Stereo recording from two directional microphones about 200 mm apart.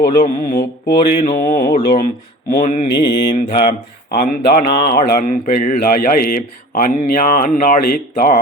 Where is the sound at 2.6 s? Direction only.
35° left (ahead or behind).